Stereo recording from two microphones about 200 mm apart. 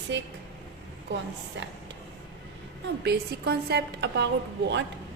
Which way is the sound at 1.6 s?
65° right (ahead or behind).